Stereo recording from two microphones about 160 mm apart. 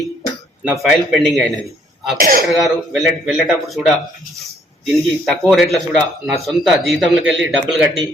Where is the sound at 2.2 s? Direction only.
65° right (ahead or behind).